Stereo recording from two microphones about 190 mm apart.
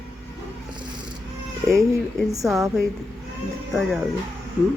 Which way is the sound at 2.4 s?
Centre (ahead or behind).